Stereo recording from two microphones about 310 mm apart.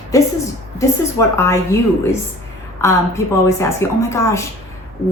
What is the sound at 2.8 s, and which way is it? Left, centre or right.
Speech, centre.